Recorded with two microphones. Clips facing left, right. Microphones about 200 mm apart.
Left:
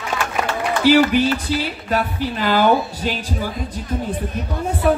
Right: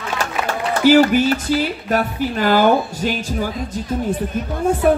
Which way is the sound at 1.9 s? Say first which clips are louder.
Right 2 dB; 45° right (ahead or behind).